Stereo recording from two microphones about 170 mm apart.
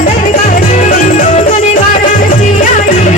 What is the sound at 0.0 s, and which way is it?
Music, 50° left (ahead or behind).